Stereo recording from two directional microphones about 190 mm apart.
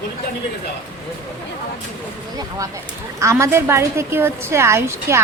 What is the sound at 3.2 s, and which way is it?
A woman's voice, 15° right (ahead or behind).